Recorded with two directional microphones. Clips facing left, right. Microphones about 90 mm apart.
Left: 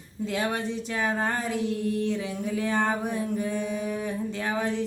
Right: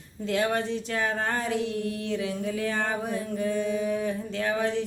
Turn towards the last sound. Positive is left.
turn(degrees=10)  # may be behind; listen again after turning